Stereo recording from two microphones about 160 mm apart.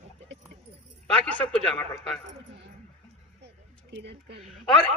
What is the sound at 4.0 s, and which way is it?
Speech, 90° right.